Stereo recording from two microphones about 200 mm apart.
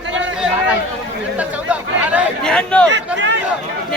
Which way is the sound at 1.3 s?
5° right (ahead or behind).